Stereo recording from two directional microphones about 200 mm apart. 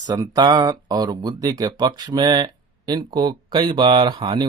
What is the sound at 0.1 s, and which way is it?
Speech, 20° right (ahead or behind).